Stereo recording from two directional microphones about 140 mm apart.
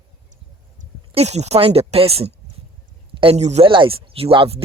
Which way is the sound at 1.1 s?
50° right (ahead or behind).